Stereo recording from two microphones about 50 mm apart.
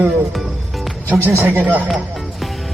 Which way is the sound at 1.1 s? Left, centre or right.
Right.